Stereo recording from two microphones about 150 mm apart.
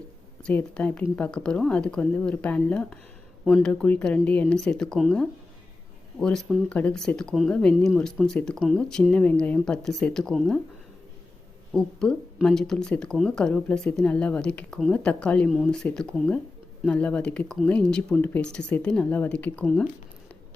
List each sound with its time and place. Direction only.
0.4 s speech: 10° left (ahead or behind)
11.7 s speech: 5° left (ahead or behind)